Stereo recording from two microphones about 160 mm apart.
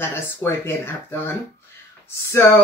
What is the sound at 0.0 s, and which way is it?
Speech, 15° left (ahead or behind).